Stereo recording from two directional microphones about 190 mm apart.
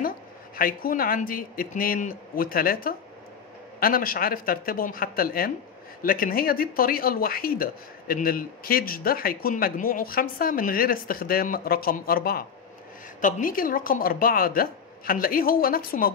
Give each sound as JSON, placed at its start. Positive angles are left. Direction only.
{"t": 0.6, "sound": "speech", "side_deg": 50}